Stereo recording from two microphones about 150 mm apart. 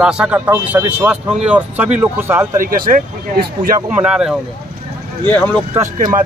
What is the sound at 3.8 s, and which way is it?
Speech, 5° right (ahead or behind).